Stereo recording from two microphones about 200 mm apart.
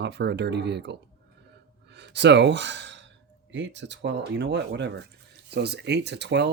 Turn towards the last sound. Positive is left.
turn(degrees=-60)  # may be behind; listen again after turning